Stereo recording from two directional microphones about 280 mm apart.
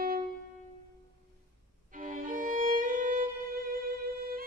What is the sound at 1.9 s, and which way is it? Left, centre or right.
Music, right.